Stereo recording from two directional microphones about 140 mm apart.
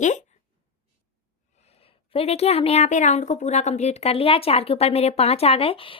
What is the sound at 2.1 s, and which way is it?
A woman's voice, 45° left (ahead or behind).